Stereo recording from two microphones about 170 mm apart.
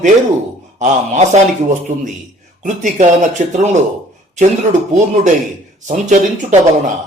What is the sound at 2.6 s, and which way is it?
Speech, 45° right (ahead or behind).